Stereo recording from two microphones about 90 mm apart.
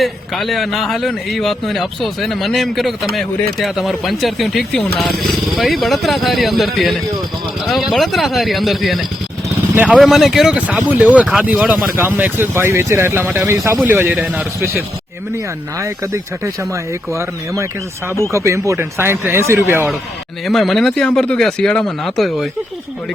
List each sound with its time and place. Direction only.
0.0 s a man's voice: centre (ahead or behind)
10.7 s speech: 20° right (ahead or behind)
11.9 s speech: 20° right (ahead or behind)
15.8 s speech: 35° right (ahead or behind)
20.4 s a man's voice: centre (ahead or behind)